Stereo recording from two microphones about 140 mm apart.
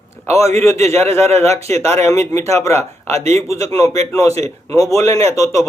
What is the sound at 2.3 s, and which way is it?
Speech, 20° left (ahead or behind).